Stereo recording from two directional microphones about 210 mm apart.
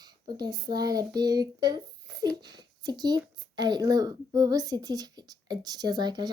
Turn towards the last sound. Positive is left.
turn(degrees=-20)  # may be behind; listen again after turning